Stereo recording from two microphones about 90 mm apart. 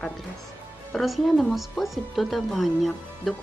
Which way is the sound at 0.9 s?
Centre (ahead or behind).